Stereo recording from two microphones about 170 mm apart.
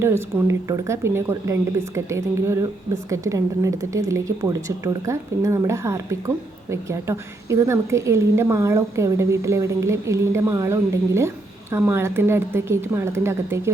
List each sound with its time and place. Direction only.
0.0 s a woman's voice: 15° right (ahead or behind)